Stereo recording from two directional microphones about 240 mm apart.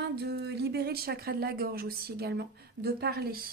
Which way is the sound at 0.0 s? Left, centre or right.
Right.